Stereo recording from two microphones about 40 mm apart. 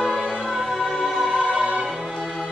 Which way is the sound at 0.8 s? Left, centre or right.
Centre.